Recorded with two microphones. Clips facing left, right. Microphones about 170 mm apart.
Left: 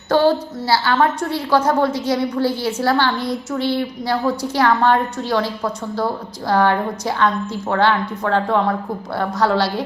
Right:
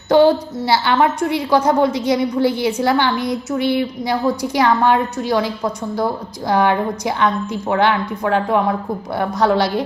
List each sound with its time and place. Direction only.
0.1 s a woman's voice: 15° right (ahead or behind)